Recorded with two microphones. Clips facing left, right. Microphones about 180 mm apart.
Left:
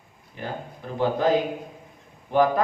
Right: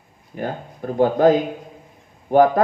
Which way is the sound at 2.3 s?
50° right (ahead or behind).